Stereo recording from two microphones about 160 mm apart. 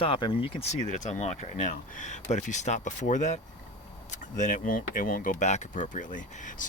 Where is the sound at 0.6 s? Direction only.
45° left (ahead or behind).